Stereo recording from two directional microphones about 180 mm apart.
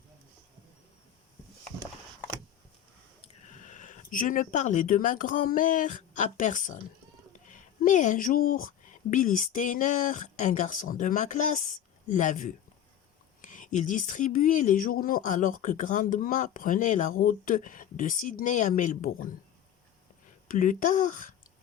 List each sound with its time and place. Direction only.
3.2 s speech: 40° left (ahead or behind)
20.5 s speech: 50° left (ahead or behind)